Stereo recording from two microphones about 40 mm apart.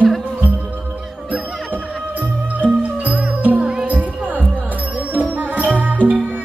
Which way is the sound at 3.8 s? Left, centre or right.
Right.